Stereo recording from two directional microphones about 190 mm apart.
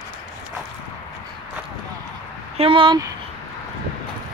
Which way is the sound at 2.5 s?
30° right (ahead or behind).